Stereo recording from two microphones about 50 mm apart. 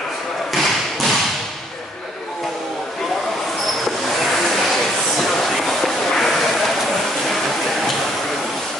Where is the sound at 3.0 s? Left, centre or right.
Centre.